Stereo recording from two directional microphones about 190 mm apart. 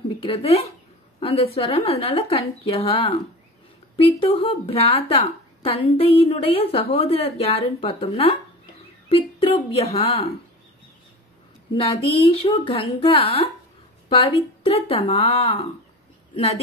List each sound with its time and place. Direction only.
0.2 s a woman's voice: 30° left (ahead or behind)
4.2 s a woman's voice: 30° left (ahead or behind)
11.7 s a woman's voice: 30° left (ahead or behind)